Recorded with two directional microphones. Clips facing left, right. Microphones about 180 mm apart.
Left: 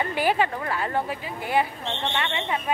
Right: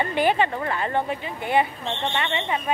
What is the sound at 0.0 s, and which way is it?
Speech, 5° left (ahead or behind).